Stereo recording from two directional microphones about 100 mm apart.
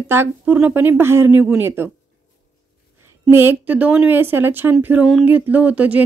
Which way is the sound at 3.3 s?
20° right (ahead or behind).